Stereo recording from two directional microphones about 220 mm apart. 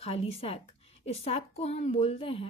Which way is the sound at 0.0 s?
25° left (ahead or behind).